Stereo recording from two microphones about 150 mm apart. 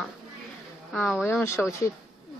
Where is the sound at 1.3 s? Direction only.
15° left (ahead or behind).